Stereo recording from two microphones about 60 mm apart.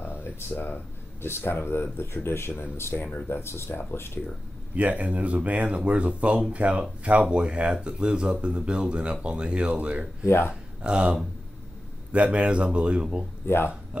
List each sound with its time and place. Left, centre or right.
0.4 s speech: left
4.7 s speech: right
10.2 s speech: left
10.8 s speech: centre
13.5 s speech: left